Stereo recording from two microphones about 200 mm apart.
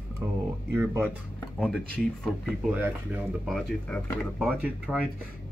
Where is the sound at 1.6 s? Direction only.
5° left (ahead or behind).